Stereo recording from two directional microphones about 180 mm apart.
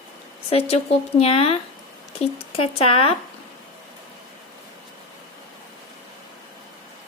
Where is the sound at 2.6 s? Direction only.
30° left (ahead or behind).